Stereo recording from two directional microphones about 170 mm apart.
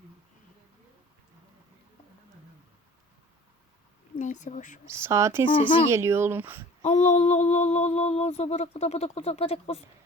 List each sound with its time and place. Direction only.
4.1 s speech: 45° left (ahead or behind)
4.9 s speech: 15° right (ahead or behind)
6.8 s a sound: 40° left (ahead or behind)